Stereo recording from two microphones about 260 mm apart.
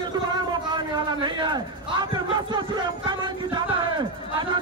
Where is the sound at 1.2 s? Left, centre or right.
Centre.